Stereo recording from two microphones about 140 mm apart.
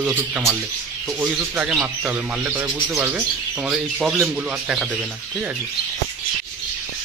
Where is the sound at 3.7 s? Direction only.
Centre (ahead or behind).